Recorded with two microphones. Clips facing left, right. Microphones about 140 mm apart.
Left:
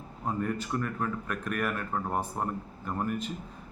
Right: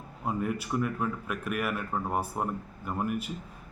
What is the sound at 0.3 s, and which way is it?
A man's voice, 5° right (ahead or behind).